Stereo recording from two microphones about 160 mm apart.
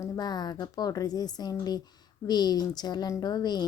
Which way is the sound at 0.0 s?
25° left (ahead or behind).